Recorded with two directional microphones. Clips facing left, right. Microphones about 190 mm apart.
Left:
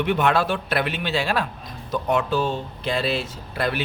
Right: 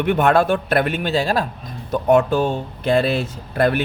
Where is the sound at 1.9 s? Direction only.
50° right (ahead or behind).